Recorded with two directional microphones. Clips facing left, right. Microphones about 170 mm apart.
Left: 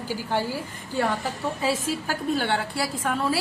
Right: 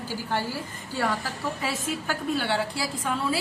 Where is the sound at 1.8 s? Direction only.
45° left (ahead or behind).